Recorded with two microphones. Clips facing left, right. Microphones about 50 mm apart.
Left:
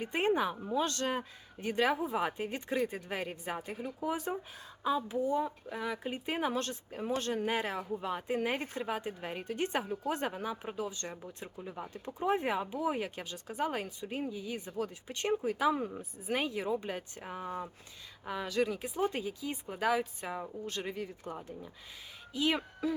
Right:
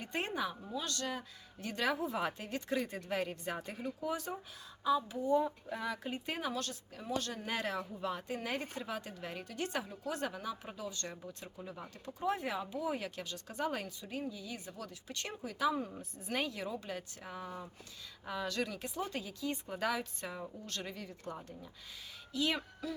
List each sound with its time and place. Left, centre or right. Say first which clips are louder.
0.0 s a woman's voice: left 7 dB; centre
5.2 s a woman's voice: even; centre
6.5 s speech: left 5 dB; left
7.4 s a woman's voice: left 4 dB; centre
8.4 s speech: left 5 dB; left
14.0 s speech: left 4 dB; left
16.0 s a woman's voice: left 3 dB; centre; by 17.7 s left
18.3 s a woman's voice: left 5 dB; centre
18.9 s a woman's voice: left 7 dB; left